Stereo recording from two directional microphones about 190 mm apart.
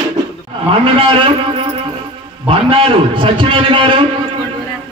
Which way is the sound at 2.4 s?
30° right (ahead or behind).